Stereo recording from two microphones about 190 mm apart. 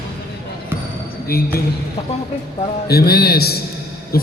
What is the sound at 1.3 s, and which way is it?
Speech, 50° left (ahead or behind).